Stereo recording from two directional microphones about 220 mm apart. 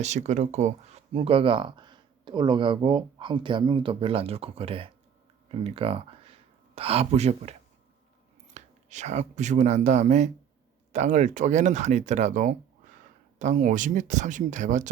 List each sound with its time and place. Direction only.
0.0 s speech: 30° right (ahead or behind)
8.5 s speech: 30° right (ahead or behind)